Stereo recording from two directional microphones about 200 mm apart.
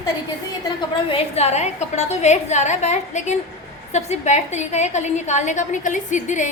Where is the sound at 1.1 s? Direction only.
30° left (ahead or behind).